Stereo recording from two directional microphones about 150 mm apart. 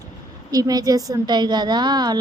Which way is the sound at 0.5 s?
25° right (ahead or behind).